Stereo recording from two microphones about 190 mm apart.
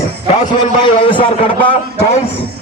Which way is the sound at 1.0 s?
25° left (ahead or behind).